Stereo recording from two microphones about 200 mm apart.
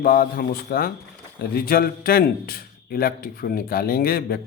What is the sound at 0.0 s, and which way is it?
A man's voice, 45° left (ahead or behind).